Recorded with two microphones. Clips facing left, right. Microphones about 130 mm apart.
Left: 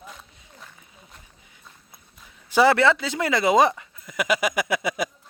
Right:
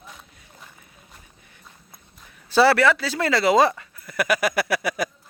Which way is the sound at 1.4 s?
15° left (ahead or behind).